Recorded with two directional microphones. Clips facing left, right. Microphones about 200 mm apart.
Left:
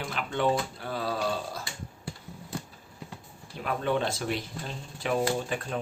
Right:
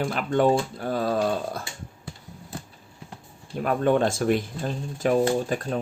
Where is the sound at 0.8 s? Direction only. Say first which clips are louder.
Right 7 dB; 45° right (ahead or behind).